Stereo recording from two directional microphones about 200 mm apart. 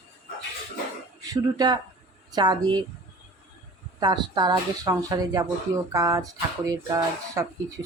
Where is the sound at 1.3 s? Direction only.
20° right (ahead or behind).